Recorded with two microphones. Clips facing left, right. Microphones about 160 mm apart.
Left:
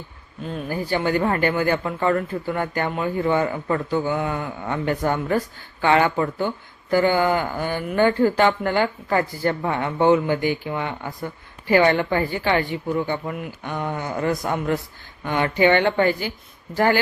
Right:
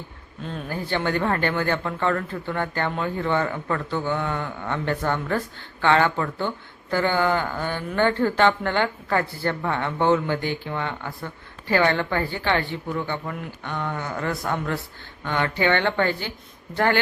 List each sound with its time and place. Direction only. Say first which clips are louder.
0.4 s speech: left 3 dB; 10° left (ahead or behind)